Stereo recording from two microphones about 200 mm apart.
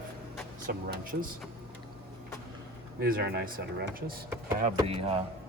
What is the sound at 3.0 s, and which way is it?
Speech, 50° right (ahead or behind).